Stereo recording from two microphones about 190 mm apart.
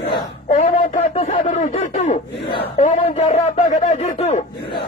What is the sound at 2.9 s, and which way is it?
Speech, 40° left (ahead or behind).